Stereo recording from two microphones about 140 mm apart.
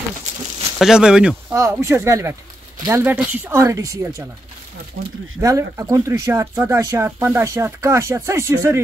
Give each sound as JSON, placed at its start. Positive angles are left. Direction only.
{"t": 0.7, "sound": "speech", "side_deg": -5}
{"t": 1.5, "sound": "speech", "side_deg": -20}
{"t": 5.4, "sound": "speech", "side_deg": -25}